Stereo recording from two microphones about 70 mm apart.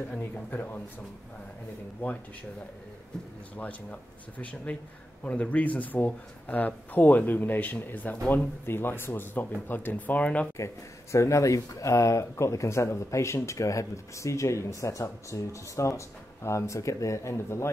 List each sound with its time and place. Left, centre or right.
0.2 s speech: left
2.0 s speech: left
3.5 s speech: left
10.6 s speech: left